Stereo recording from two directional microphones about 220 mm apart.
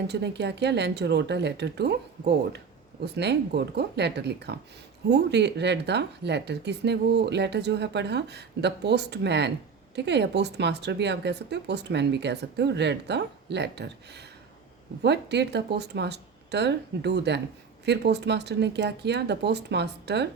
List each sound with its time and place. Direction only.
0.1 s speech: 50° right (ahead or behind)